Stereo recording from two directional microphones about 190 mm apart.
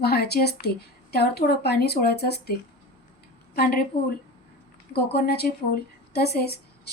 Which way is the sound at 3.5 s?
50° left (ahead or behind).